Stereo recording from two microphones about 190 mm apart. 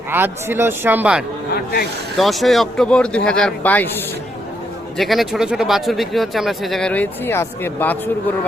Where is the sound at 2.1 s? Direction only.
Centre (ahead or behind).